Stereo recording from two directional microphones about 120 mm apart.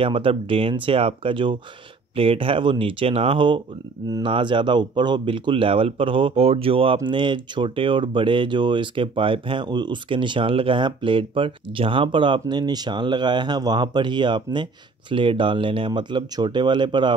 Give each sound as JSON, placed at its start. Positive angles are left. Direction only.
{"t": 0.0, "sound": "speech", "side_deg": -50}